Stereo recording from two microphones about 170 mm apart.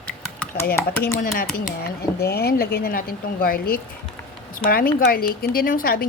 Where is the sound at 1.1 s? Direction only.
60° left (ahead or behind).